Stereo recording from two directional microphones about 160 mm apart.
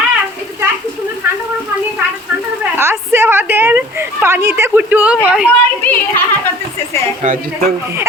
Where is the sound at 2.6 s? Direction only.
15° right (ahead or behind).